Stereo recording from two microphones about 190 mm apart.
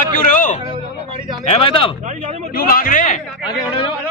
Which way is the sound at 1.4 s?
30° left (ahead or behind).